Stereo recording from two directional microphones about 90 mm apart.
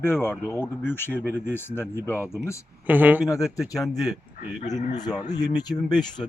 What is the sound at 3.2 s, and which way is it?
Speech, 40° left (ahead or behind).